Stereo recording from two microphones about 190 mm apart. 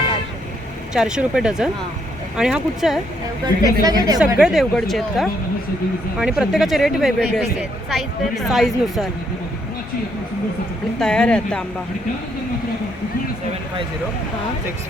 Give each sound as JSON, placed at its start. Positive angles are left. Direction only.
{"t": 0.9, "sound": "speech", "side_deg": -5}
{"t": 3.4, "sound": "a woman's voice", "side_deg": -20}
{"t": 4.4, "sound": "speech", "side_deg": 0}
{"t": 11.0, "sound": "speech", "side_deg": 5}